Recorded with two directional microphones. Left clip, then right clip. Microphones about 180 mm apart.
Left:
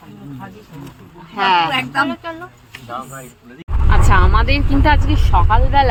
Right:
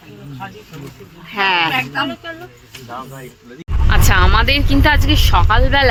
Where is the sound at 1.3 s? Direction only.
15° right (ahead or behind).